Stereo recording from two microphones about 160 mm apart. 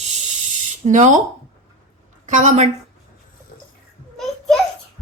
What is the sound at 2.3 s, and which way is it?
Speech, 50° right (ahead or behind).